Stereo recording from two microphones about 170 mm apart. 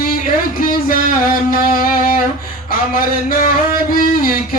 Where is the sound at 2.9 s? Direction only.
55° left (ahead or behind).